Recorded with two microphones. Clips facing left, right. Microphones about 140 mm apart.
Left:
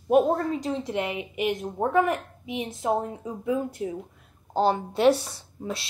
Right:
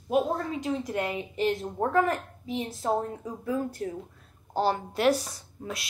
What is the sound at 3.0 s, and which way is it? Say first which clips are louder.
Speech: left 2 dB; 20° left (ahead or behind).